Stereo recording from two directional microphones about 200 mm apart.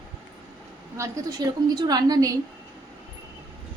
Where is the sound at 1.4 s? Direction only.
20° right (ahead or behind).